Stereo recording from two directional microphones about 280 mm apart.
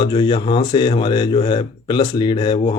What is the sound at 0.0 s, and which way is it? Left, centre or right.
Speech, centre.